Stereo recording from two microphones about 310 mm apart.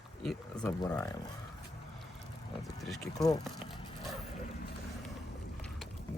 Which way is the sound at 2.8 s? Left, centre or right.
Centre.